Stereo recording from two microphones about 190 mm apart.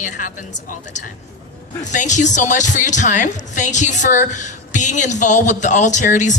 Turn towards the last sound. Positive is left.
turn(degrees=40)  # may be behind; listen again after turning